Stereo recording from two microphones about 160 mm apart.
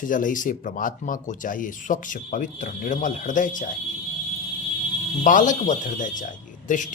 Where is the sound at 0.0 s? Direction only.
55° left (ahead or behind).